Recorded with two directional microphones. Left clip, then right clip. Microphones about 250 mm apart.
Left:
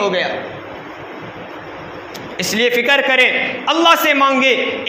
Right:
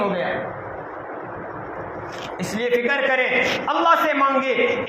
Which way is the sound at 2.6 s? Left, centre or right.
Left.